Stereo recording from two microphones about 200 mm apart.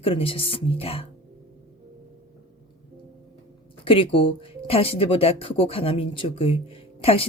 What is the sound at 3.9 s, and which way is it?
Speech, 25° left (ahead or behind).